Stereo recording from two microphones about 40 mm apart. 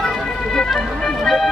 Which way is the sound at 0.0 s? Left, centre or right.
Centre.